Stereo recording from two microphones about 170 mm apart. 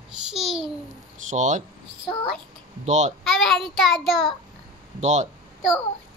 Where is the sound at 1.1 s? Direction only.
45° right (ahead or behind).